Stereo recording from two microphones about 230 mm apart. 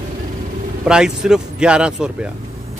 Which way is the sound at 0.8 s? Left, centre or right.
Centre.